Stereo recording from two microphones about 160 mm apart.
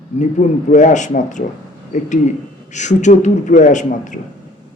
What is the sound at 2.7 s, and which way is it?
Speech, 50° left (ahead or behind).